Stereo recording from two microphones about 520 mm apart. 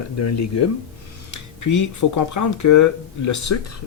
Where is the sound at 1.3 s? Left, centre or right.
Left.